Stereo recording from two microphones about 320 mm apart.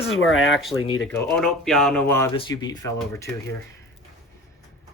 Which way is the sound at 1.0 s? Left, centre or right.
Centre.